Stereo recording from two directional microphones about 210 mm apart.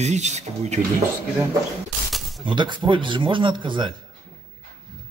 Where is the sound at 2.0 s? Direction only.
Centre (ahead or behind).